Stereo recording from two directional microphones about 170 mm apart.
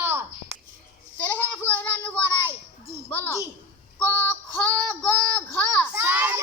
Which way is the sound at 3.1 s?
10° left (ahead or behind).